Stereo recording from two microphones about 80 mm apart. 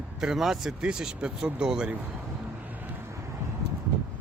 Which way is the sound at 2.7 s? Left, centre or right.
Right.